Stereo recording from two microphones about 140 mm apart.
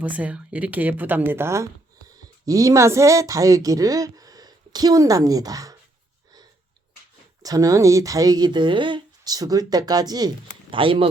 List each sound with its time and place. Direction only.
0.0 s speech: 10° right (ahead or behind); by 5.7 s 25° right (ahead or behind)
7.4 s speech: 25° right (ahead or behind)